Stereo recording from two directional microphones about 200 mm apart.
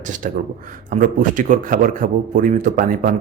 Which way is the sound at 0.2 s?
40° right (ahead or behind).